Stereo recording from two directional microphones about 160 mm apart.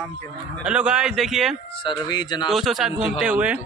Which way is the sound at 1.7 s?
30° left (ahead or behind).